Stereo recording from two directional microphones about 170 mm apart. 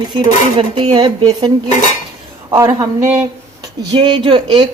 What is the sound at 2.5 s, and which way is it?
Speech, 20° right (ahead or behind).